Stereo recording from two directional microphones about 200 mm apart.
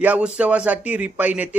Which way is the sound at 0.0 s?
10° right (ahead or behind).